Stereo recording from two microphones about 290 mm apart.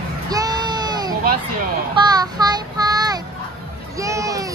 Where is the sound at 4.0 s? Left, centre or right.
Centre.